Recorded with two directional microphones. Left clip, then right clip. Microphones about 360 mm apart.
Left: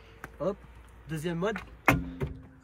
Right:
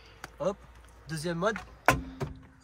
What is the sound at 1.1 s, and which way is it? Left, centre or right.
Speech, centre.